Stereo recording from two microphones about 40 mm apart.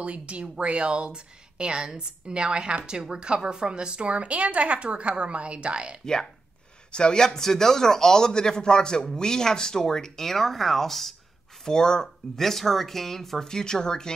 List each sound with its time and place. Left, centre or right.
0.0 s a woman's voice: right
6.9 s speech: left
7.2 s a man's voice: centre
11.6 s a man's voice: centre
12.4 s a man's voice: centre